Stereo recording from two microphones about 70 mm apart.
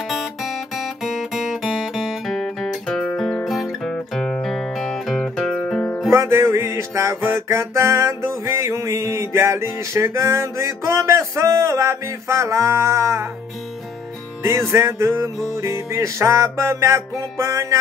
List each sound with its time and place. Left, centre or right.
1.0 s music: centre
2.3 s music: centre
5.6 s music: centre
6.1 s music: right
14.4 s music: right